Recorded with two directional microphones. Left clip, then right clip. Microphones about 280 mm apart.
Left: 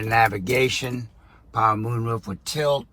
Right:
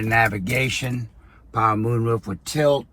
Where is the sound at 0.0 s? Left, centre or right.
Centre.